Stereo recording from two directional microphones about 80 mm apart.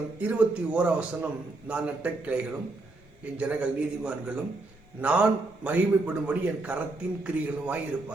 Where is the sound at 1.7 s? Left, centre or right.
Centre.